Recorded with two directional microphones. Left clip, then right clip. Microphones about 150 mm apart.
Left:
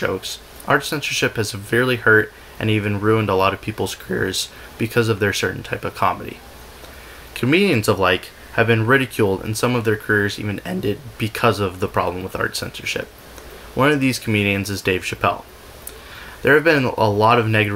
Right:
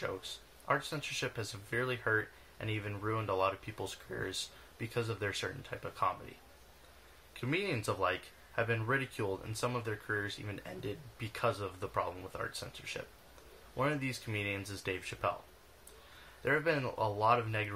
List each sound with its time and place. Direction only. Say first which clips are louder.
0.0 s speech: left 17 dB; 10° left (ahead or behind)
7.3 s speech: left 19 dB; 10° left (ahead or behind)
16.4 s speech: left 18 dB; 10° left (ahead or behind)